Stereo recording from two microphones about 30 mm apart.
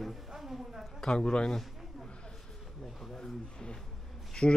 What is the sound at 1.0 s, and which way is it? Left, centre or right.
Speech, left.